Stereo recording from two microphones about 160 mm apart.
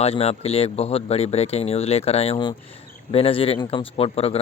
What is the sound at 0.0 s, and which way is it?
Speech, 40° left (ahead or behind).